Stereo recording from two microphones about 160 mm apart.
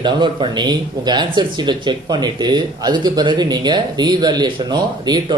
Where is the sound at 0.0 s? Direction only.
30° right (ahead or behind).